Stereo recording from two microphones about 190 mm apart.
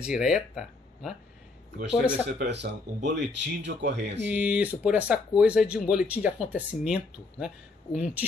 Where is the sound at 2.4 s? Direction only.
65° right (ahead or behind).